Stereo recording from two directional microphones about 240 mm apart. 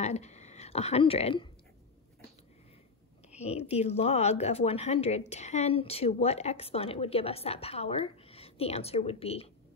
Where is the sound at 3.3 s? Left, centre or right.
Left.